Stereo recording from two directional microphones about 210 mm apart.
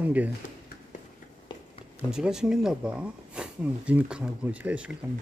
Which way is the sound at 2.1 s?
5° right (ahead or behind).